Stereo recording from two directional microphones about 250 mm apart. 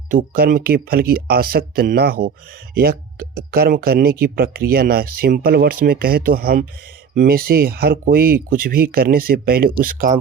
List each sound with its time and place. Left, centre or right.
0.1 s speech: right